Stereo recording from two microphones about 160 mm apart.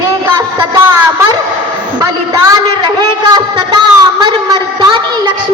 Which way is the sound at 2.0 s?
20° right (ahead or behind).